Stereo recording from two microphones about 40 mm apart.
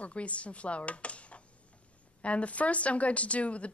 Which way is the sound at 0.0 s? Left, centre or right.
Left.